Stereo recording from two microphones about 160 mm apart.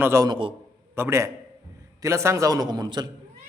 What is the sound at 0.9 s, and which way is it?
A man's voice, 15° right (ahead or behind).